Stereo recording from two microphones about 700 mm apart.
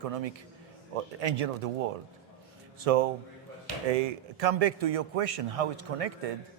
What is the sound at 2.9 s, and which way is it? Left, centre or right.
Speech, right.